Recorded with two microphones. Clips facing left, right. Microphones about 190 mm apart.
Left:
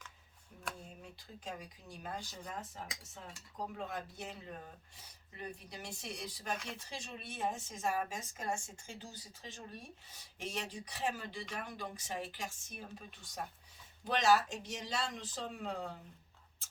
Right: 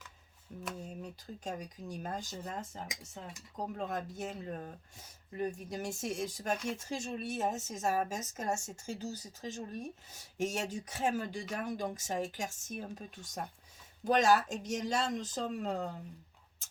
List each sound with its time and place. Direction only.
0.8 s speech: 40° right (ahead or behind)